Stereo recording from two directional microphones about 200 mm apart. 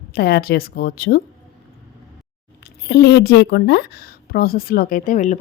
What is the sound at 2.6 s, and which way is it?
A woman's voice, 55° left (ahead or behind).